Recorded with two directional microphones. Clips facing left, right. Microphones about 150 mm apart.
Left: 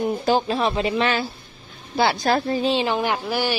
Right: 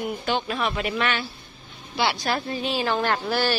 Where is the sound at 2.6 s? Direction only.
25° left (ahead or behind).